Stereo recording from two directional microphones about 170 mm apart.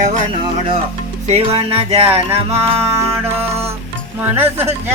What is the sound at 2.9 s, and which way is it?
Speech, 15° right (ahead or behind).